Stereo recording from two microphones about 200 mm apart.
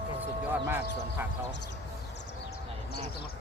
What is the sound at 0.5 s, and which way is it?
Speech, 10° right (ahead or behind).